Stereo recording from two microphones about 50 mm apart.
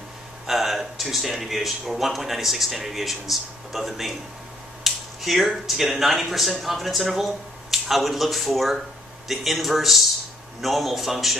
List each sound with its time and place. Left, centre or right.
0.5 s speech: centre